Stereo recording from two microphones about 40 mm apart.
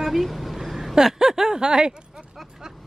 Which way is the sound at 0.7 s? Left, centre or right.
Centre.